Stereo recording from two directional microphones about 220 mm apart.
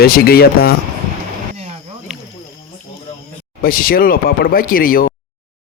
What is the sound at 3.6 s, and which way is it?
Speech, 40° left (ahead or behind).